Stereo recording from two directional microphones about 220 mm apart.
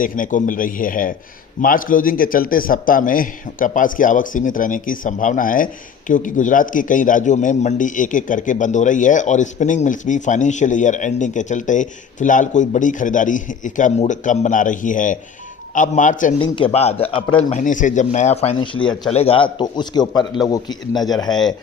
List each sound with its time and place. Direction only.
0.0 s a man's voice: 35° left (ahead or behind)
16.4 s speech: 25° left (ahead or behind)